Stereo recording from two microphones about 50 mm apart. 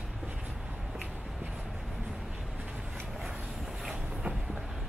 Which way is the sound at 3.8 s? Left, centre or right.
Centre.